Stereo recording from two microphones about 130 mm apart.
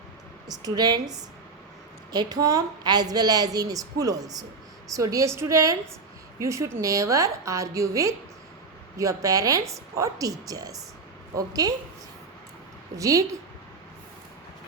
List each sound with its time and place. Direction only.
0.4 s a woman's voice: 30° right (ahead or behind)
13.0 s a woman's voice: 25° right (ahead or behind)